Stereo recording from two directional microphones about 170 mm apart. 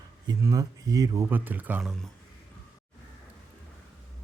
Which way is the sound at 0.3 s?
20° right (ahead or behind).